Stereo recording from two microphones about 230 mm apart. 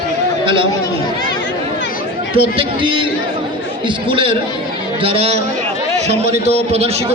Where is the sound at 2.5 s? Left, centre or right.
Right.